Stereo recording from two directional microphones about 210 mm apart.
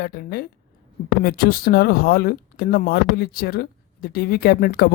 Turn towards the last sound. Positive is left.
turn(degrees=45)  # may be behind; listen again after turning